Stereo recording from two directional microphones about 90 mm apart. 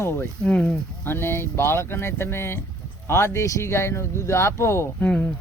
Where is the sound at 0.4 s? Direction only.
10° left (ahead or behind).